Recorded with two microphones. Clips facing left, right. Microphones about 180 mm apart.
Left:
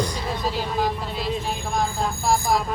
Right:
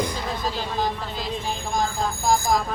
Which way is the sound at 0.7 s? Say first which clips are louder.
Left 2 dB; 5° left (ahead or behind).